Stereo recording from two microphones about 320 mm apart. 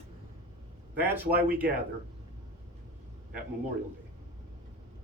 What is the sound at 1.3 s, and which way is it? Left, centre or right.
Speech, right.